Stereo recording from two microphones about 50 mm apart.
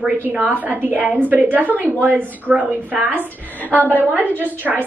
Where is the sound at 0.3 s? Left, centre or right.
Right.